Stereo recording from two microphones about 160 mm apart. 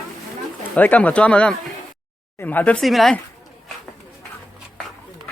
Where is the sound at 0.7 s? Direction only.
10° left (ahead or behind).